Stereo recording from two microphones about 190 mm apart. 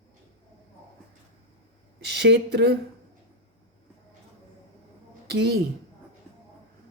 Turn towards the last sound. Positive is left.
turn(degrees=-60)  # may be behind; listen again after turning